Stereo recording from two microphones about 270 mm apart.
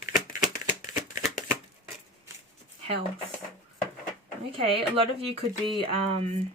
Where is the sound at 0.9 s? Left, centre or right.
Centre.